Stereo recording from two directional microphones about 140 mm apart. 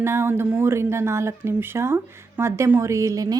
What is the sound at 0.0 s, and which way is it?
A woman's voice, 20° right (ahead or behind).